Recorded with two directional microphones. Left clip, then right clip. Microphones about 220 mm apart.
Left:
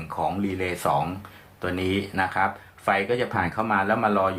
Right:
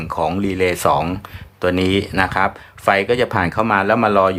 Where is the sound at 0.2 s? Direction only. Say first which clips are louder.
Right 8 dB; 50° right (ahead or behind).